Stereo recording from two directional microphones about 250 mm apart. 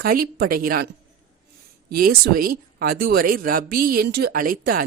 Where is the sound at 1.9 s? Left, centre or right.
Right.